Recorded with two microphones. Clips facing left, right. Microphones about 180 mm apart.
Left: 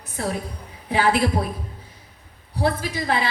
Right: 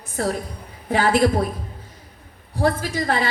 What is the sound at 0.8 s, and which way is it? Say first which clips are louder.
Speech: right 1 dB; 50° right (ahead or behind).